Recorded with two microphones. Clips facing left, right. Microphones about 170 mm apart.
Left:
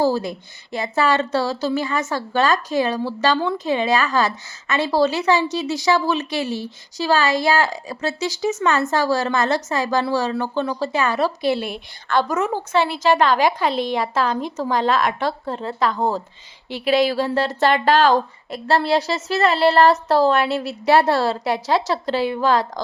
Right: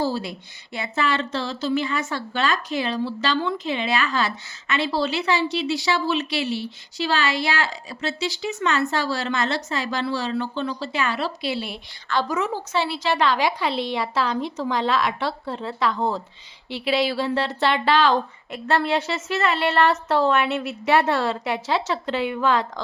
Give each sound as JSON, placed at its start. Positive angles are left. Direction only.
{"t": 0.0, "sound": "speech", "side_deg": 45}